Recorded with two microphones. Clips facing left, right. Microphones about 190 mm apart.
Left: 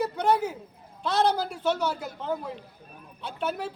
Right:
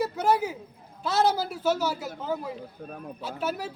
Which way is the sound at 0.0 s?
5° right (ahead or behind).